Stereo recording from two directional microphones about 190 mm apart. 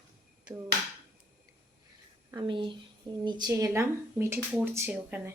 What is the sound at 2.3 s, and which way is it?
Speech, 25° right (ahead or behind).